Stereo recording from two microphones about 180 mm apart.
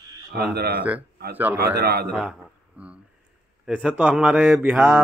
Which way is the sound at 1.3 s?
10° right (ahead or behind).